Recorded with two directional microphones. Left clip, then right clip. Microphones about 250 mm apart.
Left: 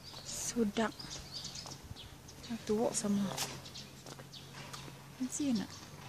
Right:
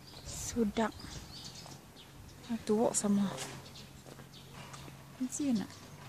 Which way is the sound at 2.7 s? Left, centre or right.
Right.